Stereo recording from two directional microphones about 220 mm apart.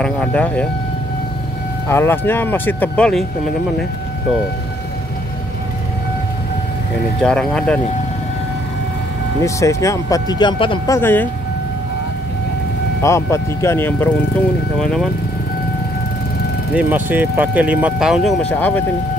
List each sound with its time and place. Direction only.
0.0 s speech: 5° left (ahead or behind)
1.9 s speech: 10° left (ahead or behind)
7.2 s speech: 5° left (ahead or behind)
9.4 s speech: 15° left (ahead or behind)
11.0 s speech: 10° left (ahead or behind)
13.0 s speech: 15° left (ahead or behind)
16.7 s speech: 5° right (ahead or behind)